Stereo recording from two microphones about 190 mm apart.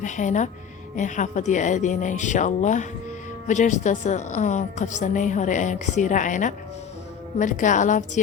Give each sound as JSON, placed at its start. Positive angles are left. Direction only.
{"t": 0.0, "sound": "a woman's voice", "side_deg": 40}